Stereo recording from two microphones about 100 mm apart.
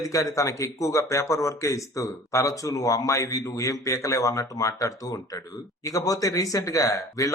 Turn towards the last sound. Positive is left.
turn(degrees=35)  # may be behind; listen again after turning